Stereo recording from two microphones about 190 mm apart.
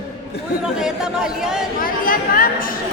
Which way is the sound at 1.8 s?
50° left (ahead or behind).